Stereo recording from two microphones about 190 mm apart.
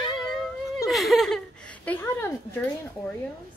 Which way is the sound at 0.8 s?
Centre (ahead or behind).